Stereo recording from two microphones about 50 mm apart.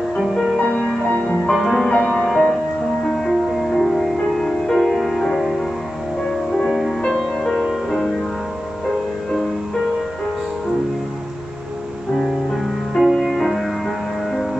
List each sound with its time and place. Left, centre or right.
0.2 s music: centre
0.6 s music: left
1.5 s music: centre
1.9 s music: centre
2.2 s music: centre
12.2 s music: centre